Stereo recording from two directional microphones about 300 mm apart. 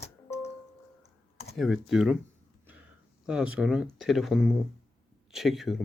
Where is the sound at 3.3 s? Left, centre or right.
Centre.